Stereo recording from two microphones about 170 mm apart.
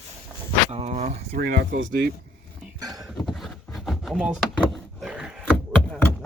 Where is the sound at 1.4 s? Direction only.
75° right (ahead or behind).